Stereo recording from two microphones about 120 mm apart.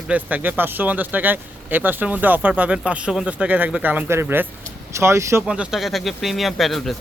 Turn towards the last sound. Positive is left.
turn(degrees=0)  # may be behind; listen again after turning